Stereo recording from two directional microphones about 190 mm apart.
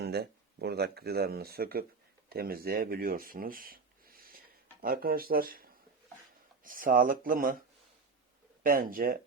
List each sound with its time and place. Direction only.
0.0 s speech: 60° right (ahead or behind)
6.7 s speech: 45° right (ahead or behind)
8.6 s speech: 50° right (ahead or behind)